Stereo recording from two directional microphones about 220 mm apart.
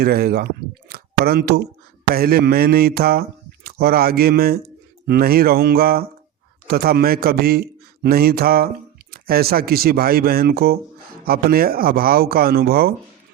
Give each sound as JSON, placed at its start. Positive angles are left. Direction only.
{"t": 0.0, "sound": "a man's voice", "side_deg": -45}